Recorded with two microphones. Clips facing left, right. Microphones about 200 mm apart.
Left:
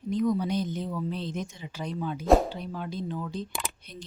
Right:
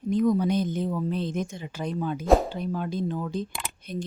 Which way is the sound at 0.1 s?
50° right (ahead or behind).